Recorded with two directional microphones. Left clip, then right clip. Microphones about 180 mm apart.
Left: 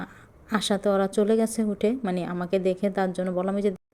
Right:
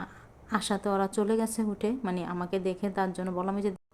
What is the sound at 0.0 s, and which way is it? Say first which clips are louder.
A woman's voice: left 2 dB; 20° left (ahead or behind).